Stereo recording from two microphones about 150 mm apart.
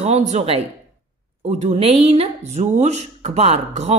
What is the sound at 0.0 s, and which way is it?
Speech, 50° right (ahead or behind).